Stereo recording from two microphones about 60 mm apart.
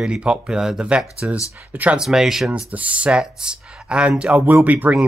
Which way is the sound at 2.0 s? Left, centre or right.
Centre.